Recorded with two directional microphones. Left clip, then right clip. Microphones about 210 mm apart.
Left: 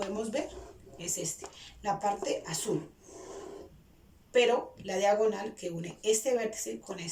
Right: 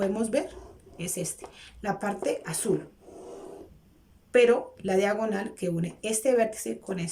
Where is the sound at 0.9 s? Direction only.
55° right (ahead or behind).